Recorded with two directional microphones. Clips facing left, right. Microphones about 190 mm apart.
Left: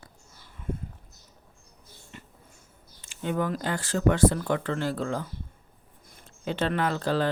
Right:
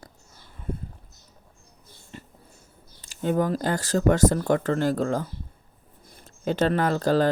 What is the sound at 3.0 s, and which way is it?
Speech, 40° right (ahead or behind).